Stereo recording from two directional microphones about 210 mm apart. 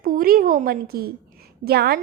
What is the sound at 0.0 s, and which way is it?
A woman's voice, 45° right (ahead or behind).